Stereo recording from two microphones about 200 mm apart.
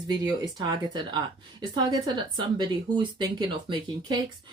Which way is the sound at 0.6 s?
20° right (ahead or behind).